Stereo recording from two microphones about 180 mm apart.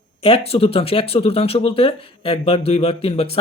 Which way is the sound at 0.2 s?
30° left (ahead or behind).